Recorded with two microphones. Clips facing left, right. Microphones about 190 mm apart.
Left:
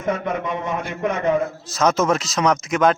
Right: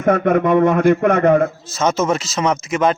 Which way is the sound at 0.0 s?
60° right (ahead or behind).